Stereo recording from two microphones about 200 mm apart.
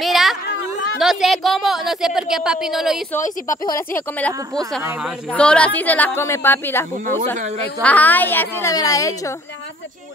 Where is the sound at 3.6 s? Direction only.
20° left (ahead or behind).